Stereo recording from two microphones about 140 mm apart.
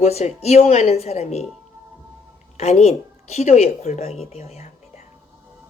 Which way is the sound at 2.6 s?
50° left (ahead or behind).